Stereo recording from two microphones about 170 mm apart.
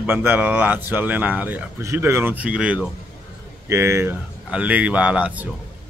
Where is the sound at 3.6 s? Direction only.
15° right (ahead or behind).